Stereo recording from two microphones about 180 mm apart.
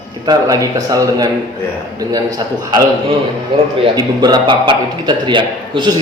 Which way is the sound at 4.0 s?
25° right (ahead or behind).